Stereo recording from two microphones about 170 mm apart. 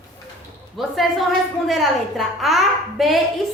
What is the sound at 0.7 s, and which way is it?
A woman's voice, centre (ahead or behind).